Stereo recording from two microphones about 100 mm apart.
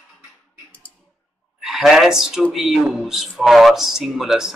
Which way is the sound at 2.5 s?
5° right (ahead or behind).